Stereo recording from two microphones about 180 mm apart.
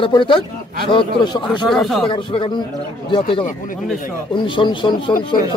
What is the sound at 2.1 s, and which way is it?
Speech, 25° left (ahead or behind).